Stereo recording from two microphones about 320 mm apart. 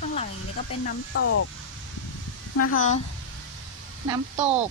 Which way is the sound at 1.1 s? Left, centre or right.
Left.